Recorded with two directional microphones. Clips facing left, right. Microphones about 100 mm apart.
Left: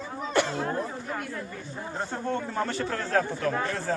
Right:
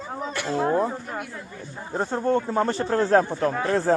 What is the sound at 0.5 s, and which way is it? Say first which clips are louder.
Speech: right 8 dB; 30° right (ahead or behind).